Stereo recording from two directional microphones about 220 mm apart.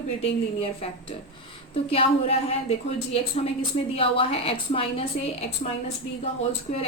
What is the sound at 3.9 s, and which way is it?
A woman's voice, 25° left (ahead or behind).